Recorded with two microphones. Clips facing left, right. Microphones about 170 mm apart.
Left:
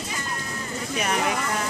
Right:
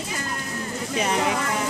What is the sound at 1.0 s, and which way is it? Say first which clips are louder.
Speech: right 2 dB; 25° right (ahead or behind).